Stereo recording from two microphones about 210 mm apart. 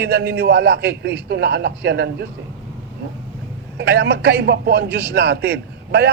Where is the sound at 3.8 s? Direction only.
50° right (ahead or behind).